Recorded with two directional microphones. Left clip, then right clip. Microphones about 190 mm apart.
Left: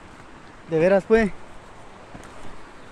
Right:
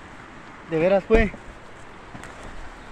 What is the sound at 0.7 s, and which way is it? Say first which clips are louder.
Speech: left 1 dB; 40° left (ahead or behind).